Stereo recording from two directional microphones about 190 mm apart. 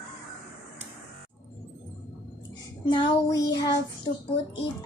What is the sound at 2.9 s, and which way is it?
Music, 20° left (ahead or behind).